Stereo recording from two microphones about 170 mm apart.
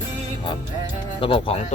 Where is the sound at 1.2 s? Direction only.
30° left (ahead or behind).